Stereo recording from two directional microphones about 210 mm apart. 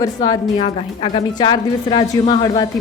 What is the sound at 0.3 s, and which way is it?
A woman's voice, 25° left (ahead or behind).